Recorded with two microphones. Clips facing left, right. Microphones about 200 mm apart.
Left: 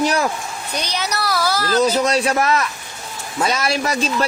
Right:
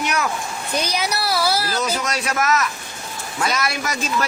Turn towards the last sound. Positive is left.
turn(degrees=30)  # may be behind; listen again after turning